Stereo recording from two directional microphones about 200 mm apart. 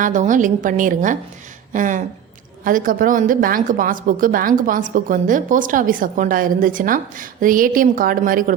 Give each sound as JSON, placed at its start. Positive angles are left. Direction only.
{"t": 0.0, "sound": "a woman's voice", "side_deg": -40}